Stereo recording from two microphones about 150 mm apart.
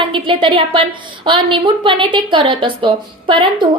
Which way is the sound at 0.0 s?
35° right (ahead or behind).